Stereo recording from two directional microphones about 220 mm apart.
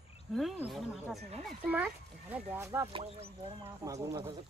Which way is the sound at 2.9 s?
25° right (ahead or behind).